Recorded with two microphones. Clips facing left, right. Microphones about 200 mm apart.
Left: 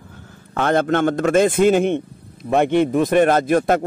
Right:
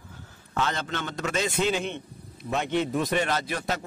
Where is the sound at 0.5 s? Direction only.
55° left (ahead or behind).